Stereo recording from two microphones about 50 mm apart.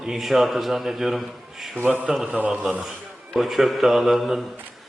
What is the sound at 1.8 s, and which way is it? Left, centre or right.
Speech, right.